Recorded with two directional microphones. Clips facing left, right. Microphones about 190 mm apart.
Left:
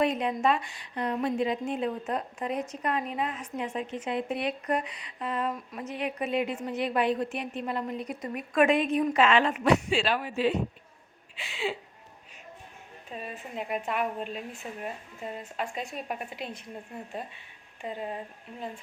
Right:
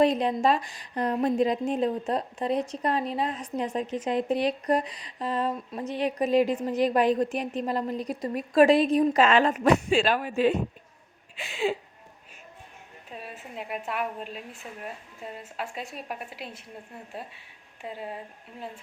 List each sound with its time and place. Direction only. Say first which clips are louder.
0.0 s a woman's voice: right 4 dB; 35° right (ahead or behind)
13.1 s a woman's voice: left 2 dB; 5° right (ahead or behind)
17.8 s a woman's voice: left 2 dB; 5° right (ahead or behind)